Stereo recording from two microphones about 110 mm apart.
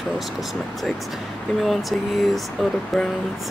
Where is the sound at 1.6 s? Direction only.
Centre (ahead or behind).